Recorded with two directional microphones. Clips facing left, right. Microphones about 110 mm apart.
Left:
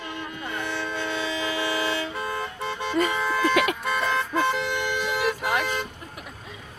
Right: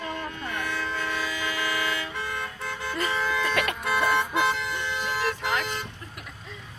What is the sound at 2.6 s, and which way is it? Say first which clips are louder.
Music: left 8 dB; 20° left (ahead or behind).